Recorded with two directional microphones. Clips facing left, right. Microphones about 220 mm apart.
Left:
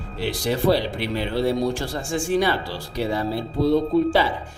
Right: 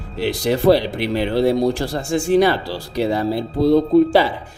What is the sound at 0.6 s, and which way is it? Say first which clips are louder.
Speech: right 6 dB; 40° right (ahead or behind).